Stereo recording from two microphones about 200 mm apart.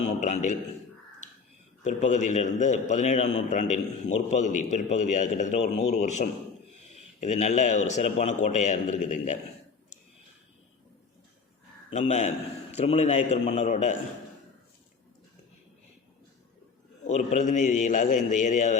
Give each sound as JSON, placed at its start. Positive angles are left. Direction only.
{"t": 0.2, "sound": "a man's voice", "side_deg": 35}
{"t": 1.8, "sound": "a man's voice", "side_deg": 35}
{"t": 11.9, "sound": "a man's voice", "side_deg": 35}
{"t": 17.1, "sound": "a man's voice", "side_deg": 35}